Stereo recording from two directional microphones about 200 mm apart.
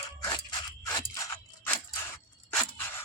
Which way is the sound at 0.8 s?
15° left (ahead or behind).